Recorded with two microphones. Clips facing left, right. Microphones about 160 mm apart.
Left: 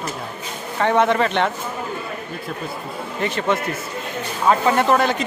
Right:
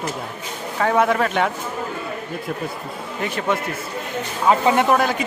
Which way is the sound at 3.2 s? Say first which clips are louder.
Left 1 dB; 5° right (ahead or behind).